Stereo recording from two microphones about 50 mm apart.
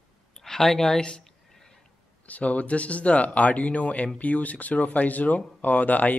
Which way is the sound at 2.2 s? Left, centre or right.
Left.